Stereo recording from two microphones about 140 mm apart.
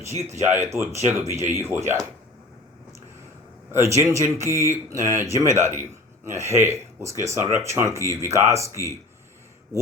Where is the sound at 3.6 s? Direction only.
20° right (ahead or behind).